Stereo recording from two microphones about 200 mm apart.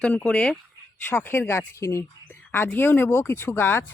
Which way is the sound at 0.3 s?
5° left (ahead or behind).